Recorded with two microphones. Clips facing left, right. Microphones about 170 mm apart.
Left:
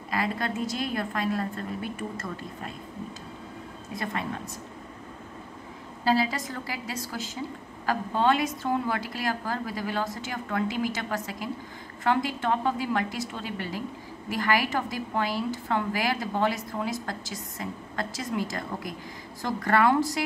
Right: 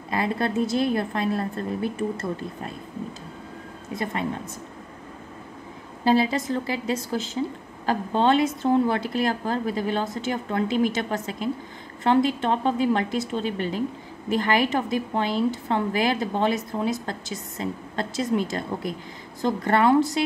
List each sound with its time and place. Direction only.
0.1 s a woman's voice: 25° right (ahead or behind)
3.9 s a woman's voice: 25° right (ahead or behind)
6.0 s a woman's voice: 25° right (ahead or behind)